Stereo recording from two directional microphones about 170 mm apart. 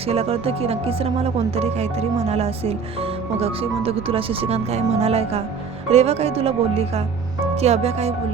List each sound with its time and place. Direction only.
0.1 s speech: 35° right (ahead or behind)